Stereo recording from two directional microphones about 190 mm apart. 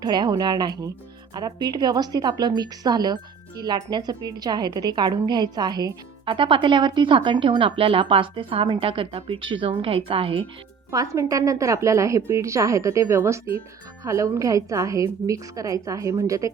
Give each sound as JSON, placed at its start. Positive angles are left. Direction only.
{"t": 0.0, "sound": "a woman's voice", "side_deg": -25}
{"t": 10.9, "sound": "a woman's voice", "side_deg": -15}